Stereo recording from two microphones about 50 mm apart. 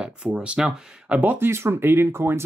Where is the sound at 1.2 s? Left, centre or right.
Right.